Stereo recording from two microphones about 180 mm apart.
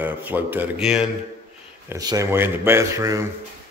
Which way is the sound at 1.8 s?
20° right (ahead or behind).